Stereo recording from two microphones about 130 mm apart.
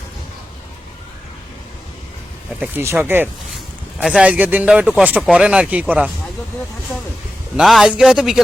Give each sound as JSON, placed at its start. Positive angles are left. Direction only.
{"t": 2.6, "sound": "speech", "side_deg": -15}
{"t": 7.5, "sound": "speech", "side_deg": 0}